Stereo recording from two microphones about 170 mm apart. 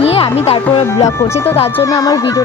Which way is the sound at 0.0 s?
35° left (ahead or behind).